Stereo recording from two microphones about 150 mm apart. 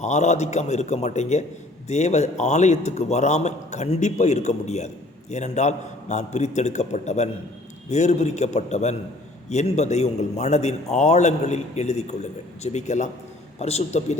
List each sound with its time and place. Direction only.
0.0 s a man's voice: 50° left (ahead or behind)